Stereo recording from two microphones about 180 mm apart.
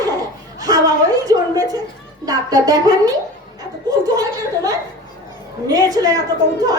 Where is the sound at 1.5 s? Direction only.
20° right (ahead or behind).